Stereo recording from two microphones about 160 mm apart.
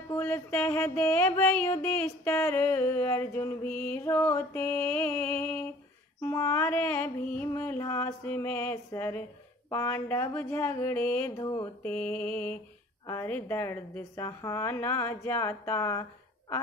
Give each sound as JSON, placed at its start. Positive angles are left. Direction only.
{"t": 0.1, "sound": "mantra", "side_deg": 15}
{"t": 11.3, "sound": "a sound", "side_deg": 25}
{"t": 11.8, "sound": "mantra", "side_deg": 10}